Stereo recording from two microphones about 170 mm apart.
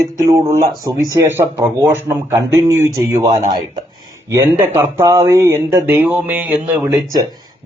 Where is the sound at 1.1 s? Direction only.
15° right (ahead or behind).